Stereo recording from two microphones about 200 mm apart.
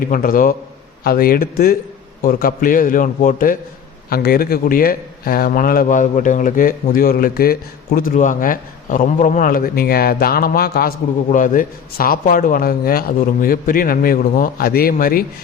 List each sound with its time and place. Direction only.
0.0 s a man's voice: 45° left (ahead or behind)